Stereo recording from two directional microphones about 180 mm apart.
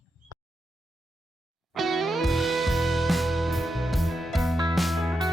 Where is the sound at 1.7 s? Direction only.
Centre (ahead or behind).